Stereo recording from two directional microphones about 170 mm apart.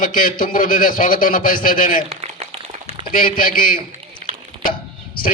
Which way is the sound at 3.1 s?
55° left (ahead or behind).